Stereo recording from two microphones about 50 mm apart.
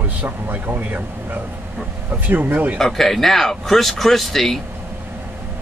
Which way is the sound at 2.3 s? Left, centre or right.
Right.